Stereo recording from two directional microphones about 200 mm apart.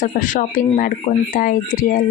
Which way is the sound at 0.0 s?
40° left (ahead or behind).